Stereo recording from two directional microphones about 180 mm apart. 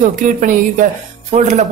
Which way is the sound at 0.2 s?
45° right (ahead or behind).